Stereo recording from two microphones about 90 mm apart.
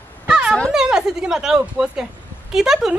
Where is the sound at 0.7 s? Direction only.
5° right (ahead or behind).